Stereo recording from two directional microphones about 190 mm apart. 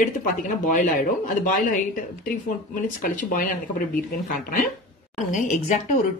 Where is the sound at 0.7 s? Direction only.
45° left (ahead or behind).